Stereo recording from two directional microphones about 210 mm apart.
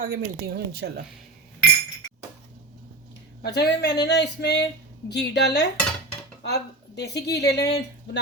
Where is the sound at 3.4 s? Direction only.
50° left (ahead or behind).